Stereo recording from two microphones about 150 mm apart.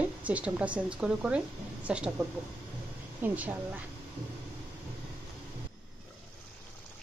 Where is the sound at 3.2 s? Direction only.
10° right (ahead or behind).